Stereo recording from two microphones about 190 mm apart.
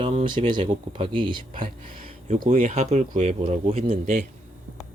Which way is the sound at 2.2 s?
40° right (ahead or behind).